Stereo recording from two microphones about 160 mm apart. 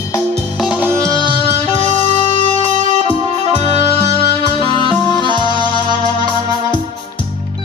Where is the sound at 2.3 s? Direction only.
35° left (ahead or behind).